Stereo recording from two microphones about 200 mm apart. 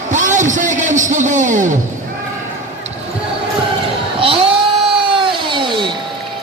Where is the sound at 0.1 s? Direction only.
40° right (ahead or behind).